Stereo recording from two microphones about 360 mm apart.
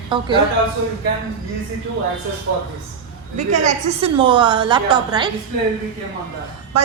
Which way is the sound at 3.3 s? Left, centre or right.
Centre.